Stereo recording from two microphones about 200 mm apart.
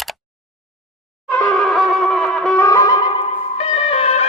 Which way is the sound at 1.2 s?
5° left (ahead or behind).